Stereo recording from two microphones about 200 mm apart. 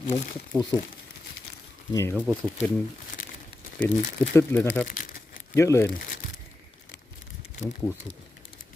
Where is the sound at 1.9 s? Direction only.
15° left (ahead or behind).